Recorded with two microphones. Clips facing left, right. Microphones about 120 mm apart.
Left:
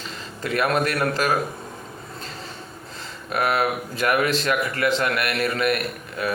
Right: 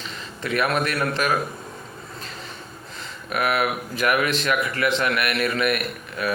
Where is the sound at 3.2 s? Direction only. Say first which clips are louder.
Left 1 dB; 30° left (ahead or behind).